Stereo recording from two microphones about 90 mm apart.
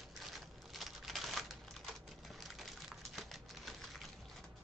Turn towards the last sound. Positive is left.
turn(degrees=0)  # may be behind; listen again after turning